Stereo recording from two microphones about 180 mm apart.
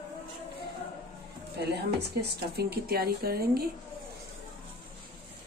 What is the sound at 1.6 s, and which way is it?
Speech, 65° right (ahead or behind).